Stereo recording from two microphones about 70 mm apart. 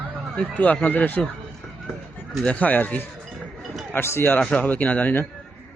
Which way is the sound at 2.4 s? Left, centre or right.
Left.